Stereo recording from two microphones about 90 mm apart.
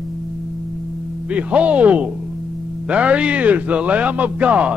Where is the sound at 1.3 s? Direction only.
15° right (ahead or behind).